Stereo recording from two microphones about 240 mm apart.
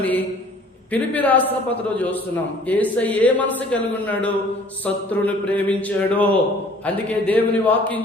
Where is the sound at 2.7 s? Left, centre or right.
Centre.